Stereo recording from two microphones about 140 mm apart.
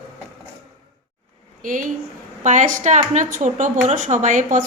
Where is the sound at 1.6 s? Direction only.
70° right (ahead or behind).